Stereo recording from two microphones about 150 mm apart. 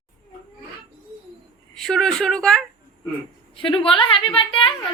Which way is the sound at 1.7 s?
5° left (ahead or behind).